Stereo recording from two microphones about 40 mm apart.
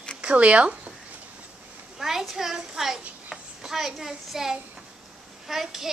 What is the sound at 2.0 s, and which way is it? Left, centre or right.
A child's voice, centre.